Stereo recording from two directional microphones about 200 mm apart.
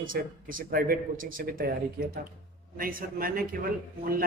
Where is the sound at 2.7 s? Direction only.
45° right (ahead or behind).